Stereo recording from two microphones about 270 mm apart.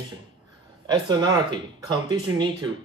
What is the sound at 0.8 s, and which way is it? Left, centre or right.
Speech, centre.